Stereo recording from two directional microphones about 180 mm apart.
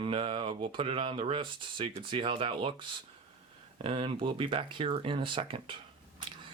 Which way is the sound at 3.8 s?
30° right (ahead or behind).